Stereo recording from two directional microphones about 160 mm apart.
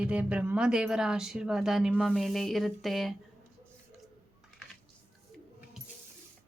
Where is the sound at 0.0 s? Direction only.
5° right (ahead or behind).